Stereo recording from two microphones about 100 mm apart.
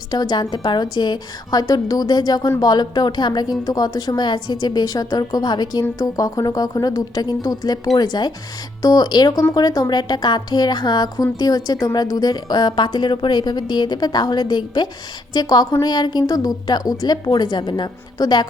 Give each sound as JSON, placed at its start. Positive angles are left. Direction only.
{"t": 0.1, "sound": "a woman's voice", "side_deg": 45}